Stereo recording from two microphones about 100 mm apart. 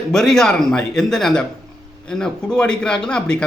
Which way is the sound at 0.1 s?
5° left (ahead or behind).